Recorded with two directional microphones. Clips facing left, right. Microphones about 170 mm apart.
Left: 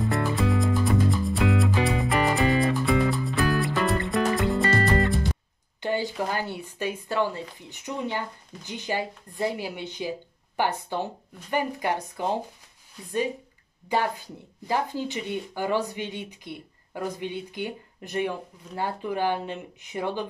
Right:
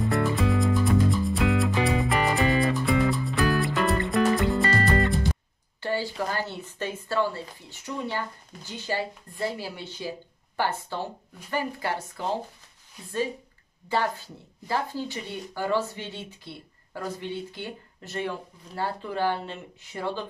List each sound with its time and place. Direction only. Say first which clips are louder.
0.0 s music: right 1 dB; centre (ahead or behind)
5.8 s speech: left 1 dB; 20° left (ahead or behind)
13.8 s speech: left 1 dB; 15° left (ahead or behind)